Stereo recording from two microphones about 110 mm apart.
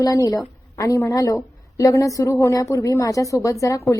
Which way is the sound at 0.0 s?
30° left (ahead or behind).